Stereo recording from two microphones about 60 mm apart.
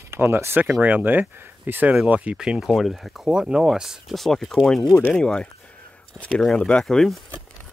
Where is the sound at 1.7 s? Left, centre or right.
Right.